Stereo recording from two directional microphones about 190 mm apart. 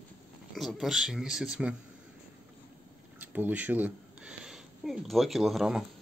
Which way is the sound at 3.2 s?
10° right (ahead or behind).